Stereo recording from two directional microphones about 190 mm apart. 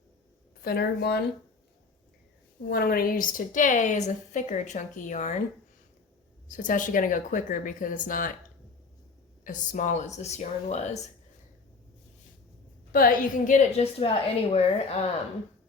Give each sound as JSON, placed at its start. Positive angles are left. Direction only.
{"t": 0.6, "sound": "speech", "side_deg": 55}
{"t": 2.6, "sound": "a woman's voice", "side_deg": 50}
{"t": 6.5, "sound": "speech", "side_deg": 45}
{"t": 9.4, "sound": "a woman's voice", "side_deg": 40}
{"t": 12.9, "sound": "a woman's voice", "side_deg": 50}